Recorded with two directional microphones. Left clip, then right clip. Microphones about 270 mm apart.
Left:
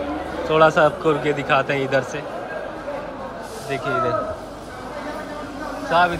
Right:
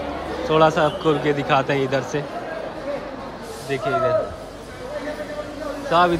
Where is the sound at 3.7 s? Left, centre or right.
Centre.